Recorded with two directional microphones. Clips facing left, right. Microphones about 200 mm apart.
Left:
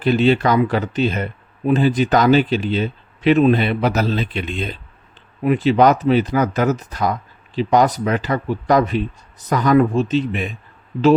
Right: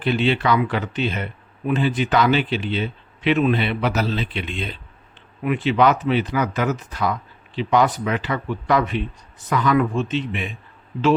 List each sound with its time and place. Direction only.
0.0 s speech: 40° left (ahead or behind)